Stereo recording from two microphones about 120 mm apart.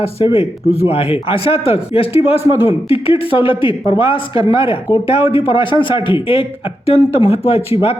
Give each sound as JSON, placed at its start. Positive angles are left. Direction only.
{"t": 0.0, "sound": "a man's voice", "side_deg": 55}